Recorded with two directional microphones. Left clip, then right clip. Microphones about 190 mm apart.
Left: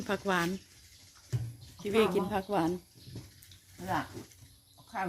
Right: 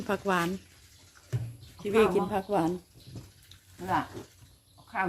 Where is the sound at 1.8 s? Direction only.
Centre (ahead or behind).